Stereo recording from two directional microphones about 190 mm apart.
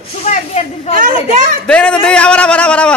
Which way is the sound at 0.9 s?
40° right (ahead or behind).